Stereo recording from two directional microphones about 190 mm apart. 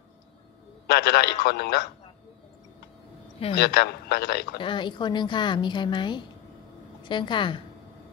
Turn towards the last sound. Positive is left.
turn(degrees=25)  # may be behind; listen again after turning